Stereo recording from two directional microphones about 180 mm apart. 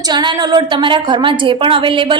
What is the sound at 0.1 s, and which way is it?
A woman's voice, 25° right (ahead or behind).